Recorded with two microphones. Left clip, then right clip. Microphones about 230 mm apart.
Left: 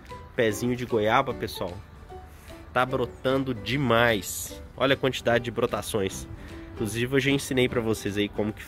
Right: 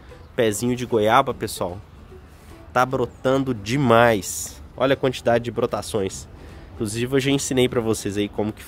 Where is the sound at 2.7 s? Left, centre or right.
Centre.